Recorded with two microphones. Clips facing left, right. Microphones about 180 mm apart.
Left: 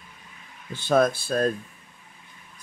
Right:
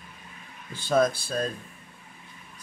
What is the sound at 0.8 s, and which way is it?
Speech, 55° left (ahead or behind).